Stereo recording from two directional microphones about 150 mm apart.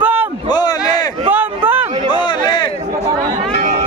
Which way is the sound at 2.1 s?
30° left (ahead or behind).